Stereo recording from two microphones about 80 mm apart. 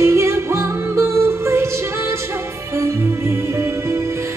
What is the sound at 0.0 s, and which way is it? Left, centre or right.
Music, right.